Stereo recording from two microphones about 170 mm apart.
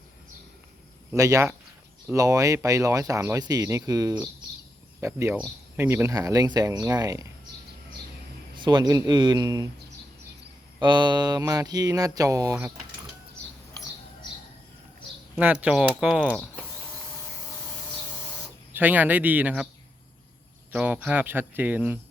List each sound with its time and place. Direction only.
1.1 s speech: 20° right (ahead or behind)
8.5 s speech: 25° right (ahead or behind)
10.8 s speech: 25° right (ahead or behind)
15.4 s speech: 5° right (ahead or behind)
18.7 s speech: 10° right (ahead or behind)
20.7 s speech: 5° right (ahead or behind)